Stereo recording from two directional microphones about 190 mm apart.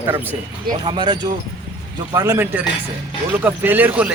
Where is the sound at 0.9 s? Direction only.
25° right (ahead or behind).